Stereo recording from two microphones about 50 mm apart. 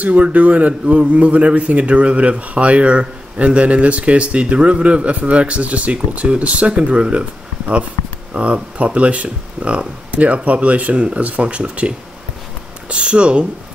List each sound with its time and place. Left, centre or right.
0.0 s a man's voice: right